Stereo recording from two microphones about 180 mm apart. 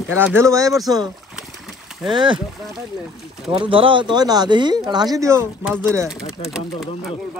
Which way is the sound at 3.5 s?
30° right (ahead or behind).